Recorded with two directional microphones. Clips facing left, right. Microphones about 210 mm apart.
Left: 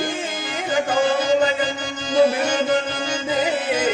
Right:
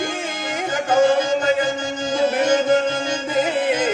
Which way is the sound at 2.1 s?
45° right (ahead or behind).